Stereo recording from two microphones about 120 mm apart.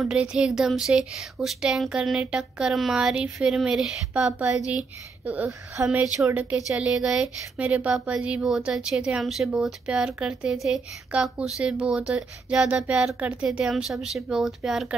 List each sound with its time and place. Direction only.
0.0 s a woman's voice: 10° right (ahead or behind)